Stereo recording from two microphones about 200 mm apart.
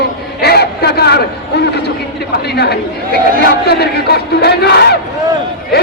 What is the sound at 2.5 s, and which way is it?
Battle cry, 55° left (ahead or behind).